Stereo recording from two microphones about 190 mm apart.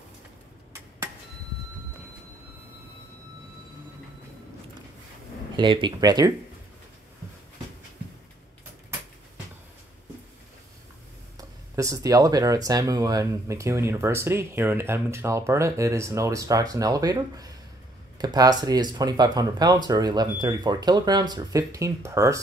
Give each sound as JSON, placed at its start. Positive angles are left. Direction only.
{"t": 0.7, "sound": "a sound", "side_deg": -15}
{"t": 5.6, "sound": "speech", "side_deg": -25}
{"t": 11.3, "sound": "speech", "side_deg": -15}